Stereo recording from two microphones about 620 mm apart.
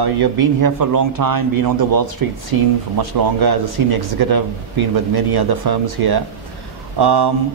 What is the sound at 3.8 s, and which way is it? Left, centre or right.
Speech, right.